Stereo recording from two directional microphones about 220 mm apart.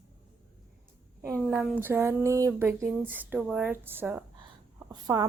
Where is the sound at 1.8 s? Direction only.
10° right (ahead or behind).